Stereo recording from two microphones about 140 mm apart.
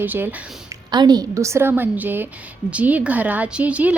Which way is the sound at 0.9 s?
30° right (ahead or behind).